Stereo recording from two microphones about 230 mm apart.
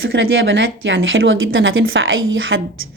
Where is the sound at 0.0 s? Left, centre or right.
Right.